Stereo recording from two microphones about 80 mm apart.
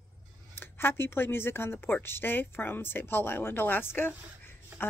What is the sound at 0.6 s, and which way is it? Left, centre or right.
Speech, left.